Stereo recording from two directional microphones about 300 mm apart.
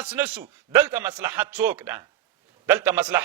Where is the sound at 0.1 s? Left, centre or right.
Centre.